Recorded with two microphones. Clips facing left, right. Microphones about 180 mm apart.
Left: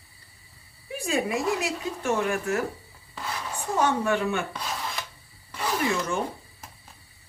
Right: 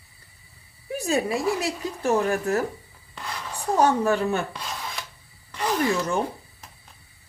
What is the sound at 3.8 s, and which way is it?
Speech, 35° right (ahead or behind).